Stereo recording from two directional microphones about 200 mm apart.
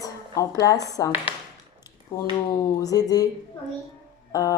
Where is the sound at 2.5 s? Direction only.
20° left (ahead or behind).